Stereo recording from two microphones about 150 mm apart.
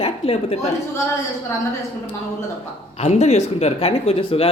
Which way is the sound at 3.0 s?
45° left (ahead or behind).